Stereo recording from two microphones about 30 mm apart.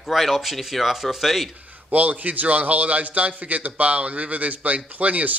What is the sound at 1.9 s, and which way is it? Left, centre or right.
Speech, right.